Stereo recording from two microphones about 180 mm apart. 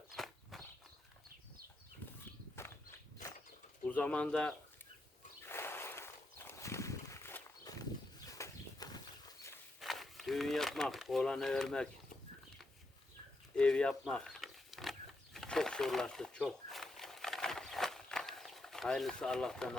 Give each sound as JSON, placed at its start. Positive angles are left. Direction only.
{"t": 0.1, "sound": "walk", "side_deg": 0}
{"t": 3.8, "sound": "speech", "side_deg": 10}
{"t": 5.5, "sound": "a sound", "side_deg": 15}
{"t": 8.3, "sound": "horse", "side_deg": 20}
{"t": 9.8, "sound": "speech", "side_deg": 0}
{"t": 13.6, "sound": "a sound", "side_deg": 5}